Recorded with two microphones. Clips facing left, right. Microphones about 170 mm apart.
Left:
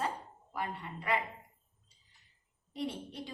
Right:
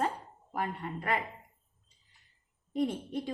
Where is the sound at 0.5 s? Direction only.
50° right (ahead or behind).